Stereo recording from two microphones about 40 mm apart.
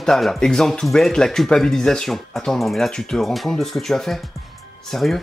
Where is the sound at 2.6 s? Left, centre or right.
Centre.